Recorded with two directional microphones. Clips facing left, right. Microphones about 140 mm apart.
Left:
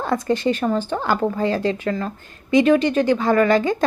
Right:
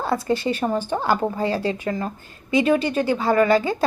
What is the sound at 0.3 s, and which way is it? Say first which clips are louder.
Speech: left 4 dB; 20° right (ahead or behind).